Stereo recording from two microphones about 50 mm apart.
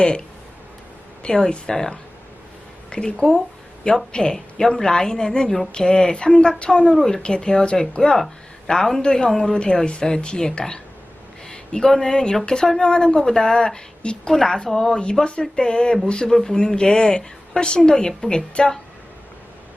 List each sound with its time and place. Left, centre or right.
0.0 s speech: centre
1.5 s speech: centre
6.9 s speech: centre